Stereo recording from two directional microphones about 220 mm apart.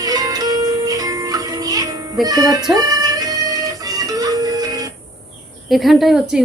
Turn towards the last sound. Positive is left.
turn(degrees=0)  # may be behind; listen again after turning